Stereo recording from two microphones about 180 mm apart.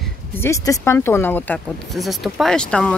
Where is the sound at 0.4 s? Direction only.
15° left (ahead or behind).